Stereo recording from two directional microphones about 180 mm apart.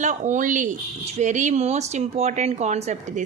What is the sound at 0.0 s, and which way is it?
A woman's voice, 40° right (ahead or behind).